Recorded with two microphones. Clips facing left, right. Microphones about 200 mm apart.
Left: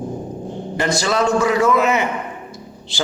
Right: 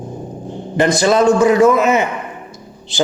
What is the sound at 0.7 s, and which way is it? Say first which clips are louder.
A man's voice: right 7 dB; 20° right (ahead or behind).